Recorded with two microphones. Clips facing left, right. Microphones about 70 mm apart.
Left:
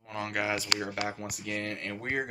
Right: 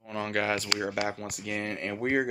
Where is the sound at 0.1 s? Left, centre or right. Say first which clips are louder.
Right 3 dB; centre.